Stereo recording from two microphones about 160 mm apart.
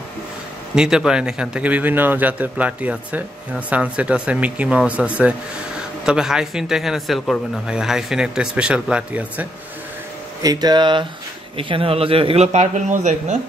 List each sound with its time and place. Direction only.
0.7 s speech: 5° right (ahead or behind)
10.4 s a man's voice: 25° right (ahead or behind); by 13.4 s 45° right (ahead or behind)